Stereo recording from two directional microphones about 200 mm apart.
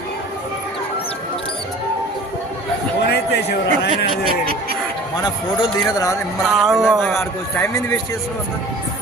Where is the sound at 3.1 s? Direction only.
55° left (ahead or behind).